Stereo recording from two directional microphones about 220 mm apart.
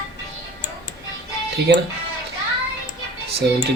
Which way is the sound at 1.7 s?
50° right (ahead or behind).